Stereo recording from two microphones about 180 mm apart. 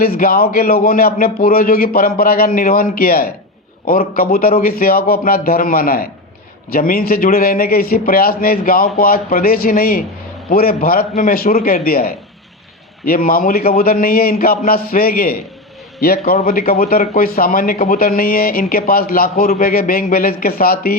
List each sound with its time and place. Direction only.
0.0 s a man's voice: 55° left (ahead or behind)